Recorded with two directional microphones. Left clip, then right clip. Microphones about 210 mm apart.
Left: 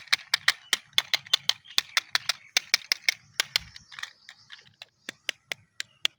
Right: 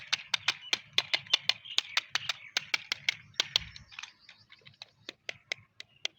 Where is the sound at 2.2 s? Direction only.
30° left (ahead or behind).